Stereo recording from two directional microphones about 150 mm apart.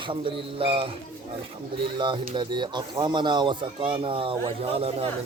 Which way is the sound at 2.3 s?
30° right (ahead or behind).